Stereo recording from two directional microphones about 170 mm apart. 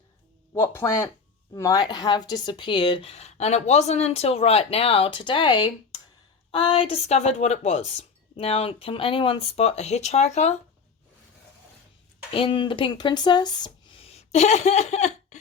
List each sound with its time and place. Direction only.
0.5 s speech: 15° left (ahead or behind); by 10.6 s 40° left (ahead or behind)
12.3 s speech: 30° left (ahead or behind)